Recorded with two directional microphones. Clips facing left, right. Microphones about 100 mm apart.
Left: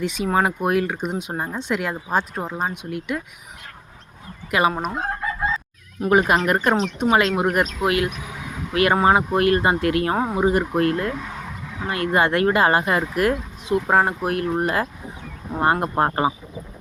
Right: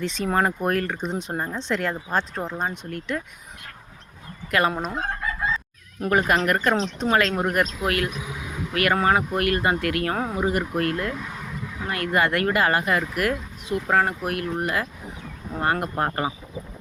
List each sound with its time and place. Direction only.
0.0 s speech: 10° left (ahead or behind)
4.8 s speech: 10° left (ahead or behind)
6.1 s speech: 20° left (ahead or behind)
6.6 s speech: 10° left (ahead or behind); by 16.3 s 25° left (ahead or behind)